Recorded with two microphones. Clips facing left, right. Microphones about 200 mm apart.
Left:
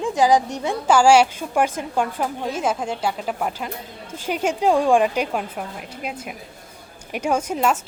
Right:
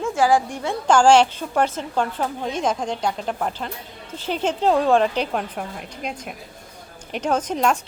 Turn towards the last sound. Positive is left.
turn(degrees=5)  # may be behind; listen again after turning